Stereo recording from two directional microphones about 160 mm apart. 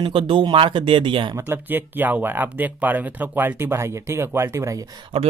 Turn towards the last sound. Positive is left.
turn(degrees=-40)  # may be behind; listen again after turning